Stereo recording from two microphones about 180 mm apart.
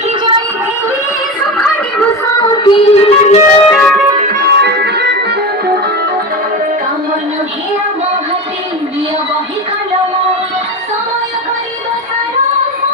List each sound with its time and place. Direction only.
1.5 s music: 10° left (ahead or behind)
2.4 s music: 25° left (ahead or behind)
3.7 s music: 5° left (ahead or behind)
4.2 s music: 50° right (ahead or behind); by 5.4 s 70° right (ahead or behind)